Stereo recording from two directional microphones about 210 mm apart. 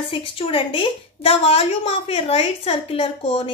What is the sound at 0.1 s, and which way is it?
A woman's voice, 25° left (ahead or behind).